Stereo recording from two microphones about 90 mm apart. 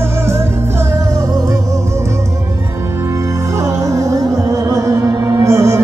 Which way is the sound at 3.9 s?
35° right (ahead or behind).